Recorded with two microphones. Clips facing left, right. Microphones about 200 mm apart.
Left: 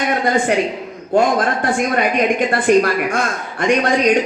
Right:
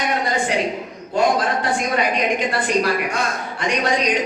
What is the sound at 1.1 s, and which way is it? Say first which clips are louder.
A man's voice: left 3 dB; 50° left (ahead or behind).